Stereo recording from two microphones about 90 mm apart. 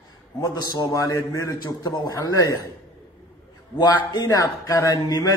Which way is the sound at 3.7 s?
50° left (ahead or behind).